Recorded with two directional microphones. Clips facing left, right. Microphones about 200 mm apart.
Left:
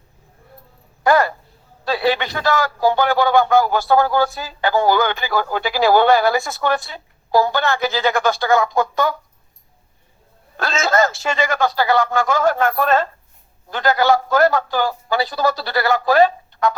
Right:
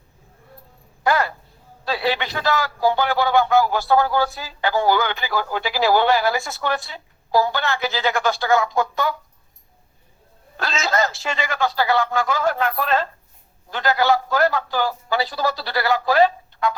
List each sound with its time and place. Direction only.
1.0 s a sound: 50° left (ahead or behind)
1.8 s a man's voice: 45° left (ahead or behind)
10.6 s a man's voice: 50° left (ahead or behind)